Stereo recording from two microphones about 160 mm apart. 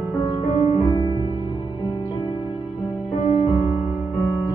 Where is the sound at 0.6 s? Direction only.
40° left (ahead or behind).